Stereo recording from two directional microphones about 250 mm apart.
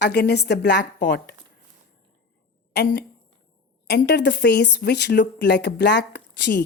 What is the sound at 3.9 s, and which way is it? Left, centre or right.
A woman's voice, left.